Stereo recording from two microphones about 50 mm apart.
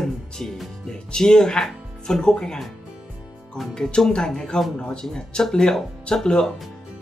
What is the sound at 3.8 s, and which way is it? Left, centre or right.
Speech, centre.